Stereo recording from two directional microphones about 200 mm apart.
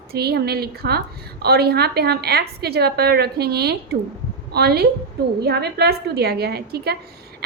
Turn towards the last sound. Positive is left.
turn(degrees=-50)  # may be behind; listen again after turning